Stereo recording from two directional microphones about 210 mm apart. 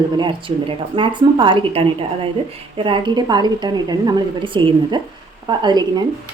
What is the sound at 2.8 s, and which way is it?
Speech, 25° right (ahead or behind).